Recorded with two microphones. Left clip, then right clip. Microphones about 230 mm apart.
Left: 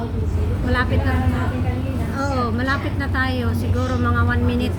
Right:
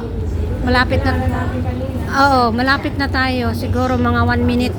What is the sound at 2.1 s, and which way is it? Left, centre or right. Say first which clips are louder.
A woman's voice: right 11 dB; right.